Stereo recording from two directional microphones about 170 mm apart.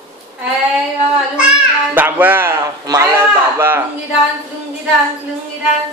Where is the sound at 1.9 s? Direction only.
10° right (ahead or behind).